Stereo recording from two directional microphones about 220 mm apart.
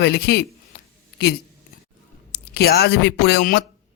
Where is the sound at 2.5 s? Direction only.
45° left (ahead or behind).